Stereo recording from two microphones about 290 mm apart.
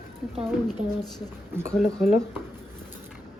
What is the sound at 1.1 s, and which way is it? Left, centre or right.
Speech, centre.